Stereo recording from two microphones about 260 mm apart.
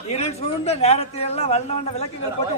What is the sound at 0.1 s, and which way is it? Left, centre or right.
A man's voice, left.